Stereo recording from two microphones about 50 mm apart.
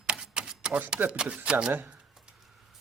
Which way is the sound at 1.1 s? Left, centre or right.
Right.